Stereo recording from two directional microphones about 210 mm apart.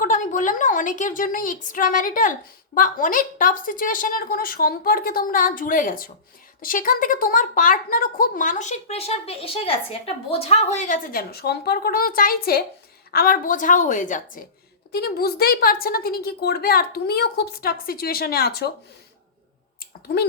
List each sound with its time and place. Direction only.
0.0 s a woman's voice: 40° left (ahead or behind)
14.9 s a woman's voice: 50° left (ahead or behind)